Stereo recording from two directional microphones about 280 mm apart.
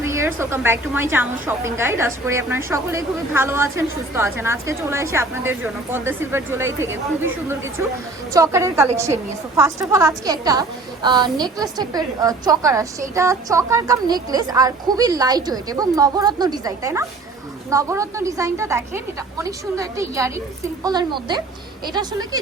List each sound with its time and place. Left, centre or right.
0.0 s a woman's voice: centre